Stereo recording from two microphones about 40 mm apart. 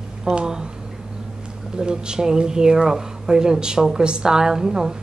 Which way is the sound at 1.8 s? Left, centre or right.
Centre.